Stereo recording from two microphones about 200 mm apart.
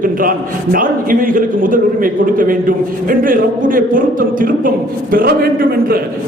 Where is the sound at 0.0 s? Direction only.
45° right (ahead or behind).